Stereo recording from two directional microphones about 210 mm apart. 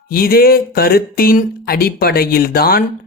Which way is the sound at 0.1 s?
45° left (ahead or behind).